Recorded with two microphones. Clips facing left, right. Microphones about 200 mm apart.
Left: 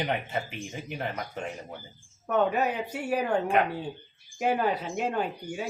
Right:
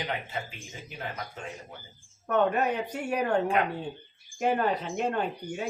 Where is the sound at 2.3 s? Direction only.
5° left (ahead or behind).